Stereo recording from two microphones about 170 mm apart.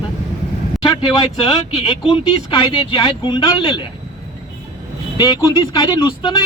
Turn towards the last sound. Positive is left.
turn(degrees=25)  # may be behind; listen again after turning